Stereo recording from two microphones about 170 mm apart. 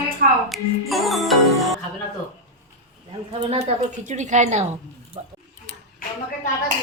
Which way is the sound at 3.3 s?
35° right (ahead or behind).